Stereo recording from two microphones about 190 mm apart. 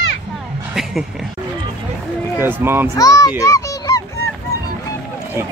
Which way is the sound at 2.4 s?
10° right (ahead or behind).